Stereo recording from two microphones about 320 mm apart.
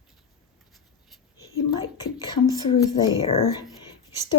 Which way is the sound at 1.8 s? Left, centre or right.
Centre.